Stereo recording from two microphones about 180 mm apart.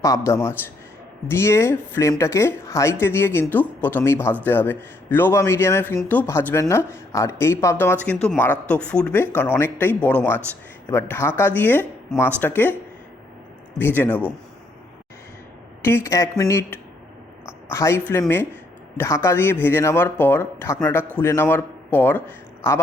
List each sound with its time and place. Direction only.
0.0 s speech: 15° left (ahead or behind)
8.0 s speech: 5° left (ahead or behind)
13.7 s speech: 10° left (ahead or behind)
15.8 s speech: 15° left (ahead or behind)